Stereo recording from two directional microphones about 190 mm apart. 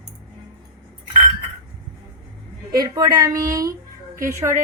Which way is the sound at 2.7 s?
20° right (ahead or behind).